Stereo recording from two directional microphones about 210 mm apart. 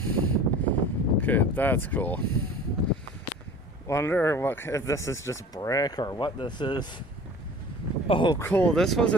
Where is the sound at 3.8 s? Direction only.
10° left (ahead or behind).